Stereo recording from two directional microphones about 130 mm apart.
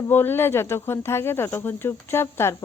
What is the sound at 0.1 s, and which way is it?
A woman's voice, 15° left (ahead or behind).